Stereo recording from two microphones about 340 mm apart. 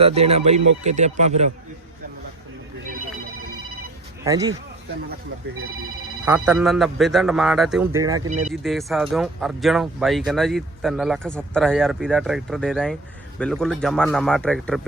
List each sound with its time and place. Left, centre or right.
0.0 s speech: centre
4.2 s speech: centre
6.2 s speech: centre
8.4 s speech: centre